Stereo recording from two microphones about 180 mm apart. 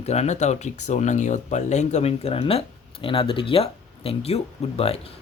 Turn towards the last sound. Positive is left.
turn(degrees=35)  # may be behind; listen again after turning